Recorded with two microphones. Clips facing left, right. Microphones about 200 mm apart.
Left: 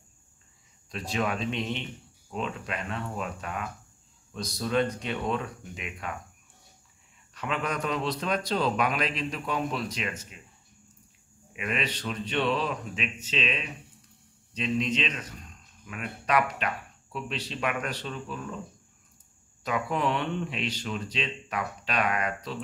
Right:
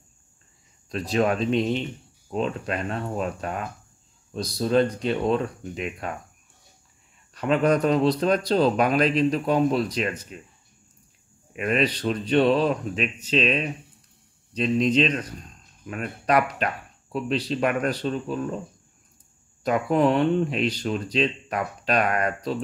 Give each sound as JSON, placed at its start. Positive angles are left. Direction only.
{"t": 0.9, "sound": "speech", "side_deg": -40}
{"t": 7.3, "sound": "speech", "side_deg": -40}
{"t": 11.5, "sound": "speech", "side_deg": -40}
{"t": 19.6, "sound": "speech", "side_deg": -45}